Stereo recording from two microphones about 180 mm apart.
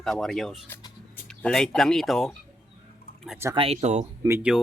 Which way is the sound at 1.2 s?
5° left (ahead or behind).